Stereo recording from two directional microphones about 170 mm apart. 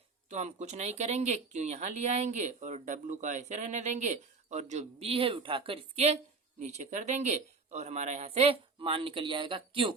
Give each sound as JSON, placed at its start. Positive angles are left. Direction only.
{"t": 0.3, "sound": "speech", "side_deg": -40}